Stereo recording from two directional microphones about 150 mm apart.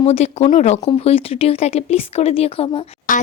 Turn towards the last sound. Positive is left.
turn(degrees=60)  # may be behind; listen again after turning